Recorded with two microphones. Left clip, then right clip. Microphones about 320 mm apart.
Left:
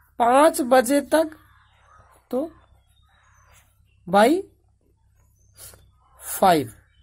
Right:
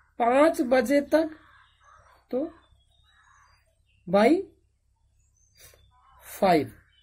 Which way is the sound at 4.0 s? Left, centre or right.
Left.